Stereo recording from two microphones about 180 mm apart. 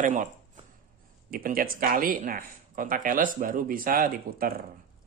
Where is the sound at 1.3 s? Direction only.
55° right (ahead or behind).